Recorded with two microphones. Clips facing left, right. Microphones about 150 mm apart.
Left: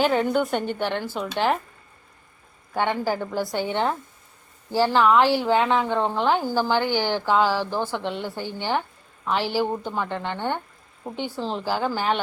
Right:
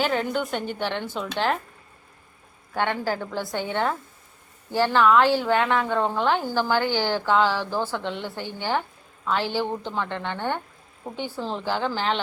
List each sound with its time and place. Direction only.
0.0 s a woman's voice: 5° left (ahead or behind)
2.7 s a woman's voice: 15° left (ahead or behind)